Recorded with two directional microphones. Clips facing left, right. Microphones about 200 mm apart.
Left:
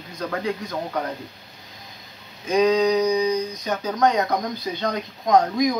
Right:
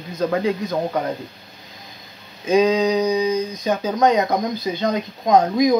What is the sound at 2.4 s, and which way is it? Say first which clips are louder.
Speech: right 2 dB; 25° right (ahead or behind).